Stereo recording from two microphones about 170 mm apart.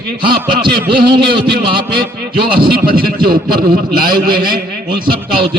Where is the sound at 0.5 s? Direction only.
30° right (ahead or behind).